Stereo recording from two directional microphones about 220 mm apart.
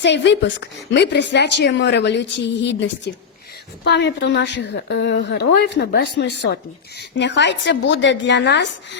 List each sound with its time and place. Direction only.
0.0 s a woman's voice: 55° left (ahead or behind)